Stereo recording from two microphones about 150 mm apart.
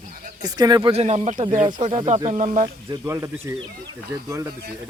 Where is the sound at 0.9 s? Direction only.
45° right (ahead or behind).